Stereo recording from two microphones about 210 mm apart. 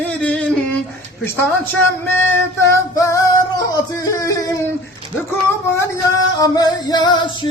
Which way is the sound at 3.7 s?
15° left (ahead or behind).